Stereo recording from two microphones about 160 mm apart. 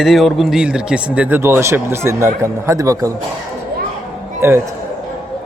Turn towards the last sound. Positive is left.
turn(degrees=-15)  # may be behind; listen again after turning